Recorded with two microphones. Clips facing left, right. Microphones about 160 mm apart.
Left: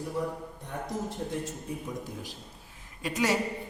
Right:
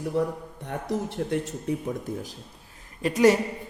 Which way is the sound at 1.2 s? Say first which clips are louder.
Right 7 dB; 75° right (ahead or behind).